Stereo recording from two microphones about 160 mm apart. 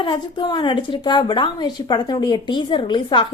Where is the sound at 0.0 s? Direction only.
30° left (ahead or behind).